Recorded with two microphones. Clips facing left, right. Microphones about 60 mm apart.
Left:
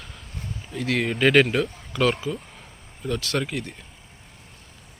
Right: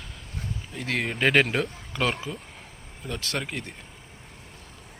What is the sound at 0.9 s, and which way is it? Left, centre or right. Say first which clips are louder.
Speech: left 3 dB; centre.